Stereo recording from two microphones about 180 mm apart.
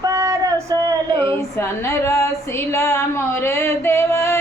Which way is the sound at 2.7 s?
15° left (ahead or behind).